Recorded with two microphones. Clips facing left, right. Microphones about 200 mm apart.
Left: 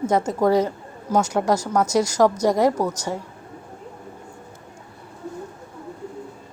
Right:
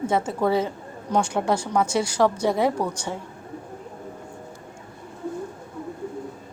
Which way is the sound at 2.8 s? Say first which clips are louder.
Left 3 dB; 5° left (ahead or behind).